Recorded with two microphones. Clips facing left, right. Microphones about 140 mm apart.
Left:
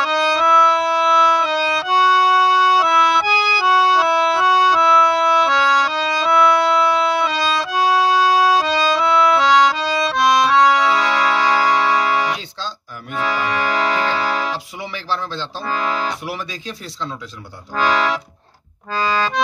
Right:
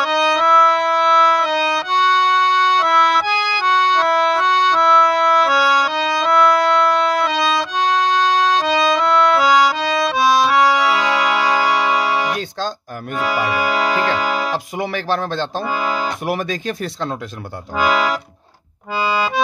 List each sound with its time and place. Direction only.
0.0 s music: centre (ahead or behind)
14.5 s music: 50° right (ahead or behind)
15.7 s music: 5° right (ahead or behind)
16.3 s speech: 50° right (ahead or behind)
17.7 s accordion: 5° right (ahead or behind)